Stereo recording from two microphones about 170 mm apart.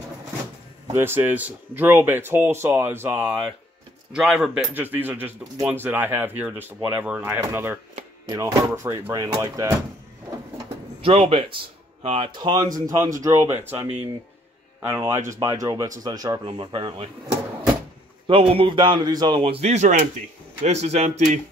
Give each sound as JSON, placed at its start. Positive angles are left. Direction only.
{"t": 0.9, "sound": "speech", "side_deg": -15}
{"t": 11.0, "sound": "speech", "side_deg": -35}
{"t": 18.2, "sound": "a man's voice", "side_deg": -30}